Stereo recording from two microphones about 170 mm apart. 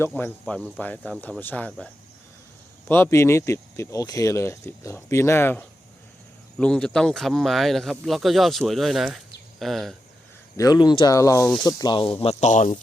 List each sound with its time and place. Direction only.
0.3 s speech: 5° left (ahead or behind)
2.8 s speech: 15° left (ahead or behind)
10.6 s speech: 25° left (ahead or behind)
12.2 s speech: 40° left (ahead or behind)